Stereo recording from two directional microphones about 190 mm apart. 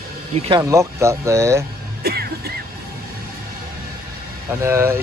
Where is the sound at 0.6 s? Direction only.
15° right (ahead or behind).